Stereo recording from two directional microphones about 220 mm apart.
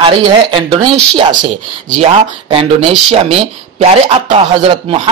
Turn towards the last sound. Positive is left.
turn(degrees=-25)  # may be behind; listen again after turning